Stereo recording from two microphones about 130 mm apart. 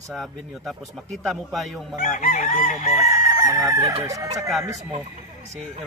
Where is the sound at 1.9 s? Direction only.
80° left.